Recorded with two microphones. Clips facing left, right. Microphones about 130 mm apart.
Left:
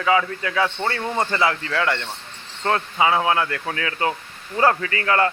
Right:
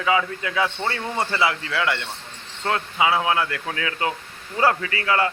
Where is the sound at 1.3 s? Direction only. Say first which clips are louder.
Left 2 dB; 10° right (ahead or behind).